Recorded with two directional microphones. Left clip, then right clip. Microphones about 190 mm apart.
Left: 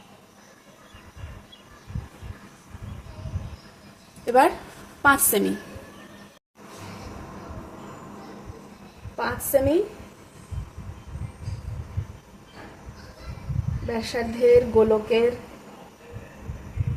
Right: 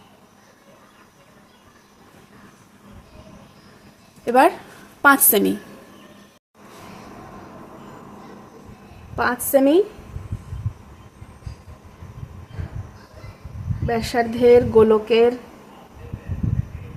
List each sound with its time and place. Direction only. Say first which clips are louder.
4.3 s a woman's voice: right 3 dB; 25° right (ahead or behind)
9.1 s a woman's voice: right 5 dB; 50° right (ahead or behind)
13.9 s speech: right 7 dB; 50° right (ahead or behind)